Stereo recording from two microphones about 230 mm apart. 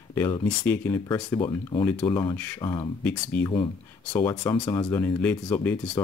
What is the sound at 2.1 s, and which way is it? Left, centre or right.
Speech, centre.